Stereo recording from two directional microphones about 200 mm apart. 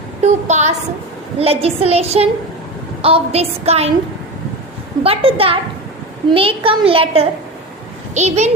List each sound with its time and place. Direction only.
0.2 s a woman's voice: 35° right (ahead or behind)
5.0 s a child's voice: 30° right (ahead or behind)